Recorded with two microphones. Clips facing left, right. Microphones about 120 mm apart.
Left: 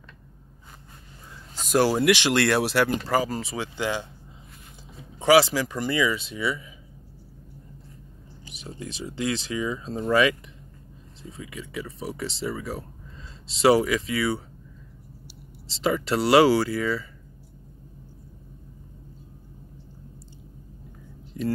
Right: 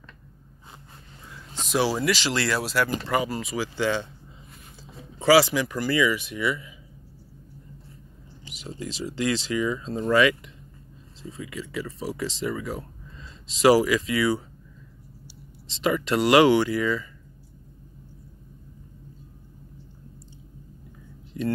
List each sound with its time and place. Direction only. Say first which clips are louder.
1.7 s speech: left 4 dB; 50° left (ahead or behind); by 2.9 s 65° left (ahead or behind)
3.1 s speech: left 1 dB; 35° left (ahead or behind); by 4.1 s 15° left (ahead or behind)
5.2 s speech: even; 20° left (ahead or behind)
5.5 s speech: right 1 dB; 35° left (ahead or behind)
8.5 s a sound: right 2 dB; 25° left (ahead or behind)
8.9 s speech: right 2 dB; 25° left (ahead or behind)
11.3 s speech: right 2 dB; 25° left (ahead or behind)
15.8 s speech: right 1 dB; 25° left (ahead or behind)